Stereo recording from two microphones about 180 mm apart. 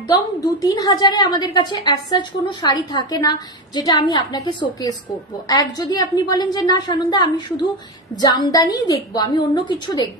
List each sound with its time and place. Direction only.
0.4 s a woman's voice: 20° left (ahead or behind)